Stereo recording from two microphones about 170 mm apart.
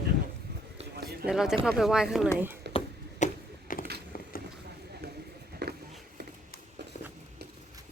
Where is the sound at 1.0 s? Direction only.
70° right (ahead or behind).